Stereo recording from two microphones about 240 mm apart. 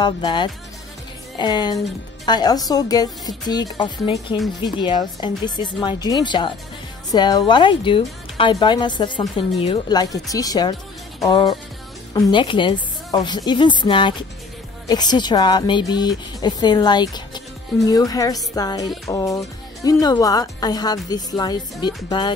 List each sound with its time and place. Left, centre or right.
0.0 s a woman's voice: centre